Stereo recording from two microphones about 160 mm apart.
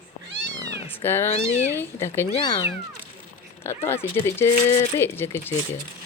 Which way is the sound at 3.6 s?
15° left (ahead or behind).